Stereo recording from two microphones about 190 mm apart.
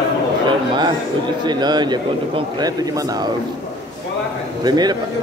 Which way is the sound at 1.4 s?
20° right (ahead or behind).